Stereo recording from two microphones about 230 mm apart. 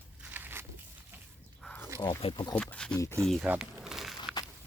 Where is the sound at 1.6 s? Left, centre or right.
Centre.